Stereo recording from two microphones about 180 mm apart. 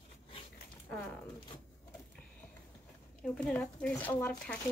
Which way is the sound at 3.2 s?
5° left (ahead or behind).